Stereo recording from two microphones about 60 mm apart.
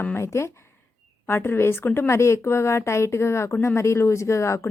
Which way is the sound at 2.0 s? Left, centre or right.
Left.